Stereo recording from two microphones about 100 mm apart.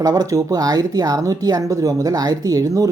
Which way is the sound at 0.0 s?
40° right (ahead or behind).